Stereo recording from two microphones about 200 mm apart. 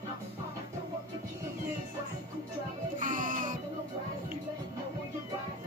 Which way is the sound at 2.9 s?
40° right (ahead or behind).